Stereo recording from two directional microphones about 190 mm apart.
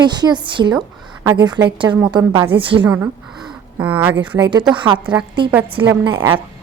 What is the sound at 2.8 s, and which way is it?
Speech, 10° right (ahead or behind).